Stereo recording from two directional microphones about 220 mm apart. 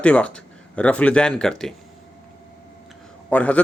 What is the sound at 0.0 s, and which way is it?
Speech, 5° left (ahead or behind).